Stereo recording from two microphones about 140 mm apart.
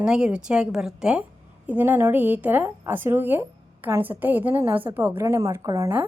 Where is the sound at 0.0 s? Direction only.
5° right (ahead or behind).